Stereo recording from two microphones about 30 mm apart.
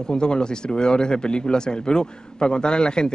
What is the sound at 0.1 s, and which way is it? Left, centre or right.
A man's voice, left.